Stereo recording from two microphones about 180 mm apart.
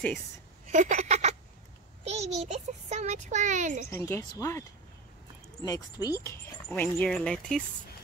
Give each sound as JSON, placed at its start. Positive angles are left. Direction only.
{"t": 0.7, "sound": "a sound", "side_deg": -40}
{"t": 2.0, "sound": "a child's voice", "side_deg": -35}
{"t": 3.9, "sound": "speech", "side_deg": 15}
{"t": 5.7, "sound": "speech", "side_deg": 20}